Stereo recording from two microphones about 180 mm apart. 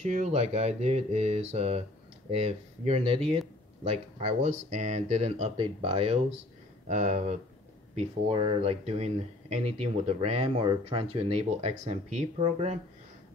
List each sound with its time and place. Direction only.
0.0 s speech: 40° right (ahead or behind)